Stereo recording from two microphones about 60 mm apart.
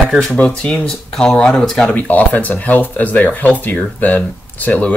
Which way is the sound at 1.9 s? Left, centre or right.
Left.